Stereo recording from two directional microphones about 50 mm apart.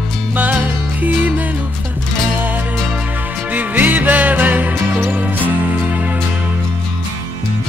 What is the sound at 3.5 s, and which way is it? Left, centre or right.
Music, right.